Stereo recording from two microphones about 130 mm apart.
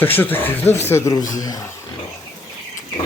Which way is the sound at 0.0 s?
15° left (ahead or behind).